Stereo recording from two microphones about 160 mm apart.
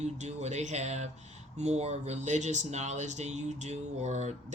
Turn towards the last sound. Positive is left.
turn(degrees=-45)  # may be behind; listen again after turning